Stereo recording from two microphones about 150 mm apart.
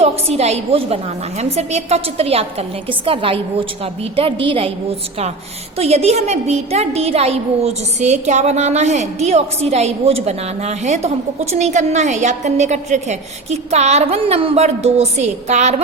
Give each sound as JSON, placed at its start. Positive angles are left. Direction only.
{"t": 0.0, "sound": "a woman's voice", "side_deg": -45}